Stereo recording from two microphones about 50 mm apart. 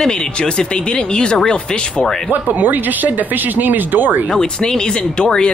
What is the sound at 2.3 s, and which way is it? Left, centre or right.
Speech, right.